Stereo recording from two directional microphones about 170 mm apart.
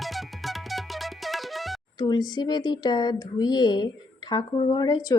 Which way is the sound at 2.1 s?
25° left (ahead or behind).